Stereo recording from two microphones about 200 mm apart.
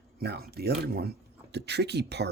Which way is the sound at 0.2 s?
50° right (ahead or behind).